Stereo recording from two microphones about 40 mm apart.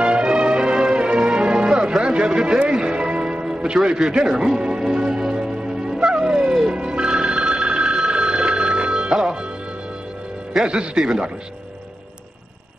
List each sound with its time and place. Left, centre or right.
0.0 s music: right
3.4 s speech: right
5.3 s music: right
6.7 s telephone bell ringing: right
10.6 s speech: right